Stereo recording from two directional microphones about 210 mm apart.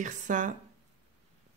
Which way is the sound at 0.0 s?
35° right (ahead or behind).